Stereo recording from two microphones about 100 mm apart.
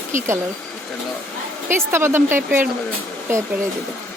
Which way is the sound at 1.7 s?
25° right (ahead or behind).